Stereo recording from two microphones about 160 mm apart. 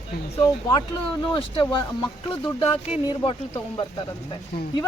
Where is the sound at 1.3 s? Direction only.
30° left (ahead or behind).